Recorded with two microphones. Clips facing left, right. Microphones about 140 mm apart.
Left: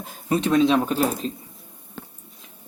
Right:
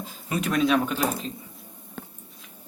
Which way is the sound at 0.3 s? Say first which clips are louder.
Left 5 dB; 30° left (ahead or behind).